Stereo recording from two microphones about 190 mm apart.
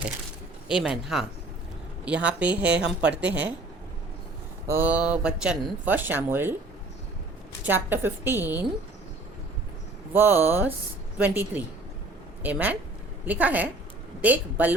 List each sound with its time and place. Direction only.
0.7 s speech: centre (ahead or behind)
4.6 s speech: 10° right (ahead or behind)
7.6 s speech: 10° right (ahead or behind)
10.1 s speech: 10° right (ahead or behind)